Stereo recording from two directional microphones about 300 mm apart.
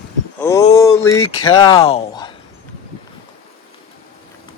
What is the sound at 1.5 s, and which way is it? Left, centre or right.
Speech, centre.